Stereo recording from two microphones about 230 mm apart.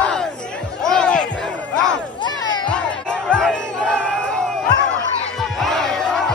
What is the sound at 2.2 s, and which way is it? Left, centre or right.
Crowd, centre.